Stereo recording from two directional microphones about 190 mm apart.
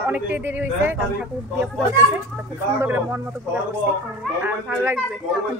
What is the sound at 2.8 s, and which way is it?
Speech, 15° right (ahead or behind).